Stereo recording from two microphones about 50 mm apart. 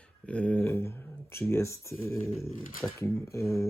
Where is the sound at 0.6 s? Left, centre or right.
Left.